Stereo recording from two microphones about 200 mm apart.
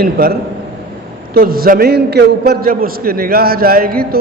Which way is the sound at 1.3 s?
50° right (ahead or behind).